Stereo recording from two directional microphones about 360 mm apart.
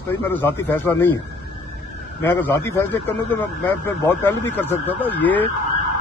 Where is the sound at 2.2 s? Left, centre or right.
Centre.